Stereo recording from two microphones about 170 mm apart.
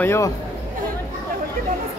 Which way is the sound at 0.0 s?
15° left (ahead or behind).